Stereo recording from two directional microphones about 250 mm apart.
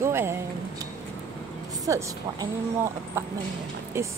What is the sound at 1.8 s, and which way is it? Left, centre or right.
Speech, centre.